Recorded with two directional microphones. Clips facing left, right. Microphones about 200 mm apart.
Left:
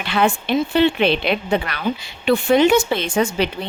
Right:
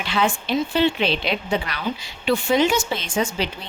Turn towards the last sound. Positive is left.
turn(degrees=60)  # may be behind; listen again after turning